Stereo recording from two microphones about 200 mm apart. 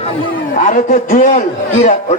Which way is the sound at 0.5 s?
40° left (ahead or behind).